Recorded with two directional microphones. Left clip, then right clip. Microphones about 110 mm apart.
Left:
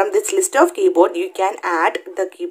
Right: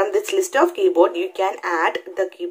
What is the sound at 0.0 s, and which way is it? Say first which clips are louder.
Speech: left 2 dB; 35° left (ahead or behind).